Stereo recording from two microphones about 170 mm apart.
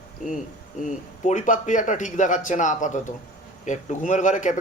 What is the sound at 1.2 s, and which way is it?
A man's voice, 45° left (ahead or behind).